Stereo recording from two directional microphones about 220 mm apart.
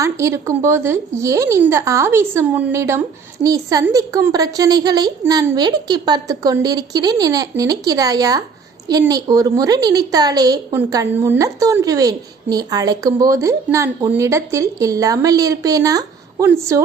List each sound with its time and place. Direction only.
0.0 s a woman's voice: 15° right (ahead or behind)